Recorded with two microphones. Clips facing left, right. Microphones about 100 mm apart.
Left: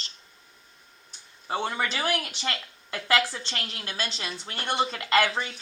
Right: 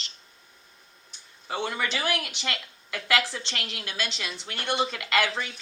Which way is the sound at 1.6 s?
30° left (ahead or behind).